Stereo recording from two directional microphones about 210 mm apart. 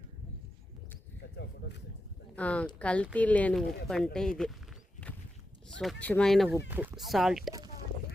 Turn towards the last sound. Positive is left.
turn(degrees=0)  # may be behind; listen again after turning